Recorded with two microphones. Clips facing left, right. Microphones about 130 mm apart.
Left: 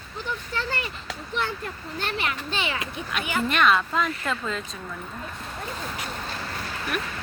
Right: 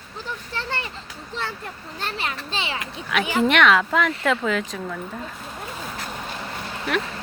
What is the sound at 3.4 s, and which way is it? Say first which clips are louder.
A woman's voice: right 3 dB; 90° right.